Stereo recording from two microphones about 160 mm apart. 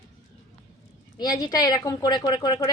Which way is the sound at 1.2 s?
20° left (ahead or behind).